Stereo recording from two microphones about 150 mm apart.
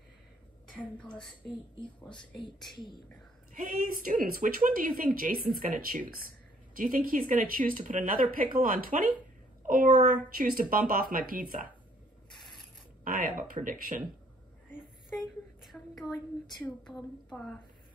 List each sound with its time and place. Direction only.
0.8 s speech: 5° left (ahead or behind)
1.8 s speech: 30° left (ahead or behind)
3.5 s a woman's voice: 65° right (ahead or behind)
13.0 s a sound: 65° right (ahead or behind)
13.4 s speech: 65° right (ahead or behind)
15.1 s a sound: centre (ahead or behind)
16.5 s a woman's voice: 5° left (ahead or behind)